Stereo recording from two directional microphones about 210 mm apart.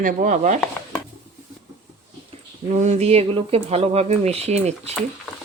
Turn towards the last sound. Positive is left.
turn(degrees=-30)  # may be behind; listen again after turning